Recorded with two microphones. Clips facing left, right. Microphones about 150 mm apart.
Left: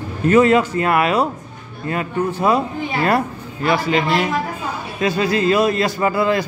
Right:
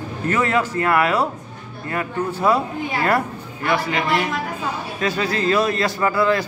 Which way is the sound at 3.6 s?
25° left (ahead or behind).